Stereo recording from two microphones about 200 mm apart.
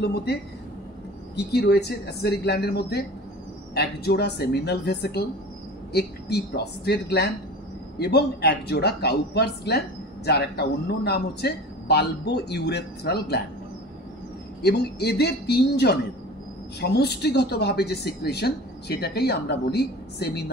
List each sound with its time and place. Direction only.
0.0 s speech: 55° left (ahead or behind)
14.6 s speech: 55° left (ahead or behind)